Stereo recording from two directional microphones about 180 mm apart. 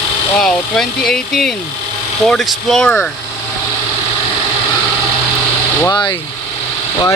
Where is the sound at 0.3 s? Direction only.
5° left (ahead or behind).